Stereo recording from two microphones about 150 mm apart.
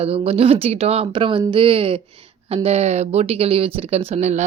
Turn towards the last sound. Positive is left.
turn(degrees=-50)  # may be behind; listen again after turning